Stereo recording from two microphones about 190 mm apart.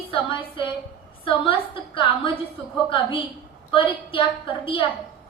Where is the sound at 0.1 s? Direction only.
25° left (ahead or behind).